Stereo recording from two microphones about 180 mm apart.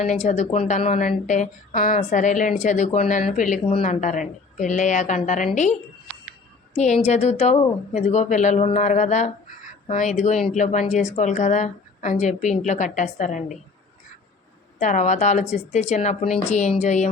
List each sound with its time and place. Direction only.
0.0 s a woman's voice: 40° left (ahead or behind)
7.0 s speech: 35° left (ahead or behind)
14.8 s speech: 40° left (ahead or behind)